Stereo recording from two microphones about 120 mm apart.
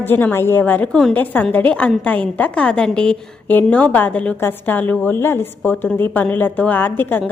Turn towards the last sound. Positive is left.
turn(degrees=15)  # may be behind; listen again after turning